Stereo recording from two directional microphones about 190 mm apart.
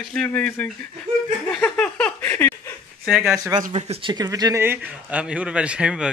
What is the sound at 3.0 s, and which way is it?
Speech, centre (ahead or behind).